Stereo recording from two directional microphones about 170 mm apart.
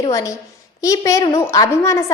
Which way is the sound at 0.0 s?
20° left (ahead or behind).